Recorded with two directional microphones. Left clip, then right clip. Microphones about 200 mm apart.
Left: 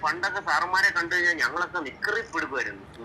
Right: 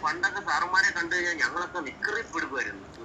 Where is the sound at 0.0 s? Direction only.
30° left (ahead or behind).